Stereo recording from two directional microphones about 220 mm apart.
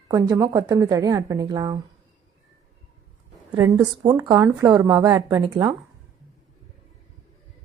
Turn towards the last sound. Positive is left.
turn(degrees=-15)  # may be behind; listen again after turning